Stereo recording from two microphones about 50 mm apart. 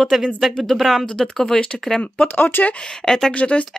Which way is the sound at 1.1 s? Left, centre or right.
Centre.